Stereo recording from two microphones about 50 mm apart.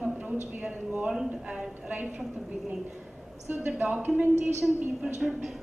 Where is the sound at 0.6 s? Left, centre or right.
Right.